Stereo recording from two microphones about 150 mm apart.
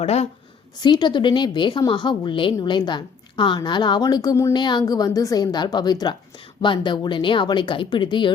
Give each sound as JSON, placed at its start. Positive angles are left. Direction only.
{"t": 0.0, "sound": "a woman's voice", "side_deg": 45}
{"t": 0.8, "sound": "a woman's voice", "side_deg": 30}